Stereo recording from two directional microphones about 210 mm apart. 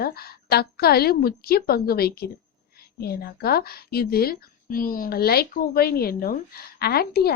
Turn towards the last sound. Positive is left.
turn(degrees=50)  # may be behind; listen again after turning